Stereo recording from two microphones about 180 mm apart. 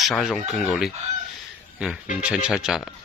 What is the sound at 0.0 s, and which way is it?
Speech, centre (ahead or behind).